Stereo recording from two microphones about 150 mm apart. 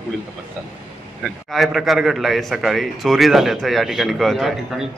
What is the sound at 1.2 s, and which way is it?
A man's voice, centre (ahead or behind).